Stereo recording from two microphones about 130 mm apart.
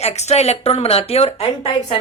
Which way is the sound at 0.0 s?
55° left (ahead or behind).